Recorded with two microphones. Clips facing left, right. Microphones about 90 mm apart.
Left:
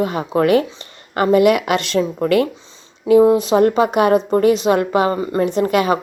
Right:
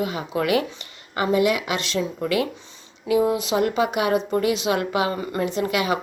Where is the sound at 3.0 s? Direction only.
40° left (ahead or behind).